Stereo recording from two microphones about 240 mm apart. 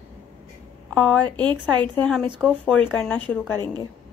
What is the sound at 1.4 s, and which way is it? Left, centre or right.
Speech, centre.